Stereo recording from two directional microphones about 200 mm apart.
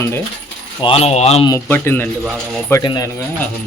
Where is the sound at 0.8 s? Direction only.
30° left (ahead or behind).